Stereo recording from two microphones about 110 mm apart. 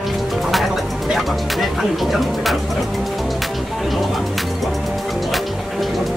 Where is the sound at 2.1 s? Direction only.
Centre (ahead or behind).